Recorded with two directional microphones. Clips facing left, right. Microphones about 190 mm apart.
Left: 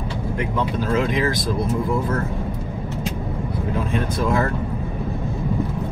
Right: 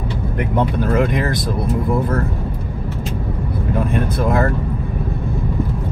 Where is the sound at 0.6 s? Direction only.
55° right (ahead or behind).